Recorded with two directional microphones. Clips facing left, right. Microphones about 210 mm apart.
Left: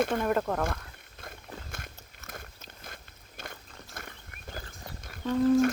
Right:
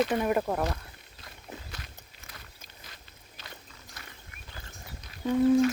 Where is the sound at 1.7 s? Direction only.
50° left (ahead or behind).